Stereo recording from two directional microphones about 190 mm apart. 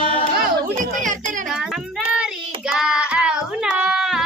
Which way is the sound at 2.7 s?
5° right (ahead or behind).